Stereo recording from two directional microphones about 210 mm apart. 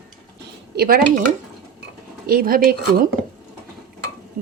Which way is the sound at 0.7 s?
45° right (ahead or behind).